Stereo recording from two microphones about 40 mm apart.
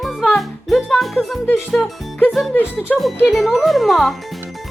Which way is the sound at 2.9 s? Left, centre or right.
Left.